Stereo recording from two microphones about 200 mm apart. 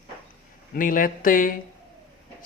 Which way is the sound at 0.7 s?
45° left (ahead or behind).